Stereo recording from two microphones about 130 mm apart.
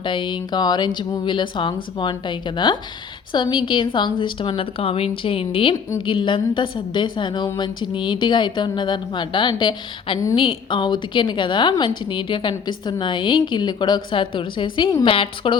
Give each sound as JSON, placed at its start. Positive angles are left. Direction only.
{"t": 0.0, "sound": "a woman's voice", "side_deg": 40}